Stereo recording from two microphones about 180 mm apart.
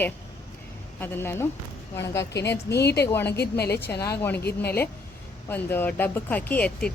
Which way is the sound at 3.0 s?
15° left (ahead or behind).